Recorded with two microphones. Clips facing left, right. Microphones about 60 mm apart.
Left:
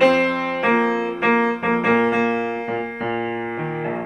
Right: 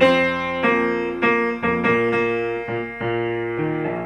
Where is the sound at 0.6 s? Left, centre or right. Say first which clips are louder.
Left 1 dB; centre.